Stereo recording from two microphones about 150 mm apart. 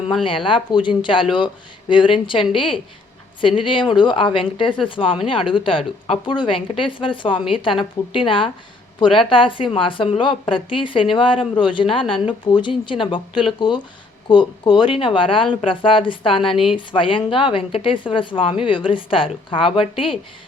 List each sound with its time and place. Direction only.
0.3 s speech: 35° left (ahead or behind)